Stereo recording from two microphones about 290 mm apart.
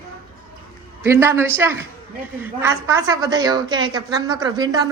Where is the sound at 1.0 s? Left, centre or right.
Centre.